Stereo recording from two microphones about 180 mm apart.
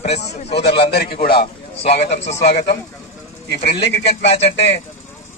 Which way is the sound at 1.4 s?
35° left (ahead or behind).